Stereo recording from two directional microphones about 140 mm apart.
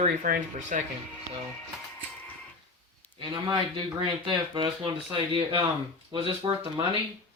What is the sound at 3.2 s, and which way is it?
Speech, 35° right (ahead or behind).